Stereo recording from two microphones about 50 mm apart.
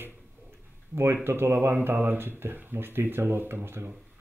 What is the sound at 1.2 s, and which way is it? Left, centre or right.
Speech, right.